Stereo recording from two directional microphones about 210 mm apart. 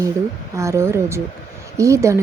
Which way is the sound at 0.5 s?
15° right (ahead or behind).